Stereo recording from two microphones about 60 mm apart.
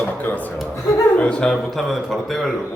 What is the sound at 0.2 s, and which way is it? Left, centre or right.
Chuckle, left.